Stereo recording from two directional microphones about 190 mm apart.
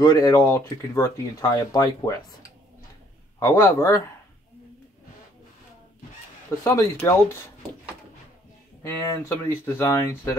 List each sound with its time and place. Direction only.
0.0 s speech: 20° left (ahead or behind)
3.3 s speech: 15° left (ahead or behind)
6.6 s speech: 15° left (ahead or behind)
8.8 s speech: 15° left (ahead or behind)